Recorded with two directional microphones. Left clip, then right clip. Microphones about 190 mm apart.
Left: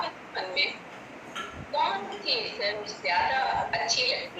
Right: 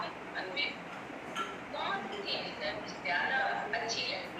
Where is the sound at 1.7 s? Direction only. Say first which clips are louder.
Left 9 dB; 45° left (ahead or behind).